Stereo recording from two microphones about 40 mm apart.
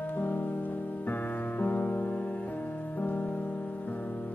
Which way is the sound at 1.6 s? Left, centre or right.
Left.